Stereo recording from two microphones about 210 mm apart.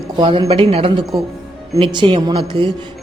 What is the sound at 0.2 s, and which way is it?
A woman's voice, 25° right (ahead or behind).